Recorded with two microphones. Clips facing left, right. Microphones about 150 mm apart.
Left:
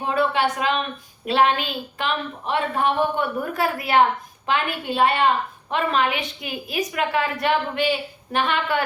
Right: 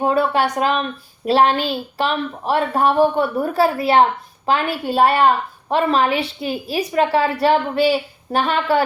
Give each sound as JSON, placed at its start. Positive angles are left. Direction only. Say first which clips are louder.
{"t": 0.0, "sound": "a woman's voice", "louder": "right 4 dB", "side_deg": -40}